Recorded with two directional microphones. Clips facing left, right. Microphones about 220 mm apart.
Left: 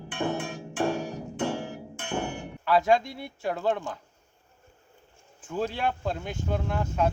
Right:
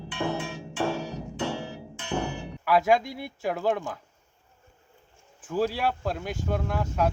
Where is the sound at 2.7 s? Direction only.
10° right (ahead or behind).